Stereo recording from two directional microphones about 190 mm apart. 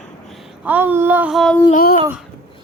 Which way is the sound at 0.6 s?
10° right (ahead or behind).